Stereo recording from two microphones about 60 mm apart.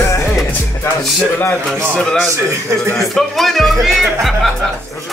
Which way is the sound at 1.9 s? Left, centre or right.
Centre.